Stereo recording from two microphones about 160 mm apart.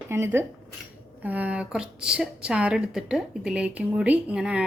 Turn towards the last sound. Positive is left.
turn(degrees=-5)  # may be behind; listen again after turning